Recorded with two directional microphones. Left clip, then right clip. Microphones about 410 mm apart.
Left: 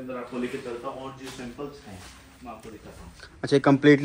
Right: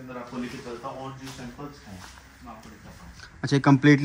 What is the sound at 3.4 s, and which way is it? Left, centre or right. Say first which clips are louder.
Speech: left 1 dB; centre.